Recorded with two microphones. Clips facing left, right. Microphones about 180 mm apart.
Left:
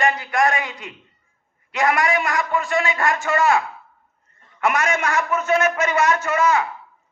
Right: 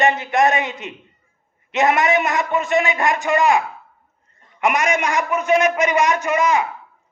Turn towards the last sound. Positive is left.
turn(degrees=-15)  # may be behind; listen again after turning